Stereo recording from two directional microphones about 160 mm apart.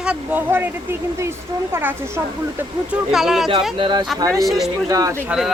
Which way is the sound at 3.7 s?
30° right (ahead or behind).